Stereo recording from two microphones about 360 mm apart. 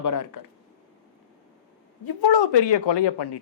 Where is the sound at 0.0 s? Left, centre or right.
Left.